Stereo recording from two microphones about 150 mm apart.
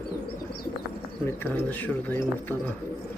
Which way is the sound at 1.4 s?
10° left (ahead or behind).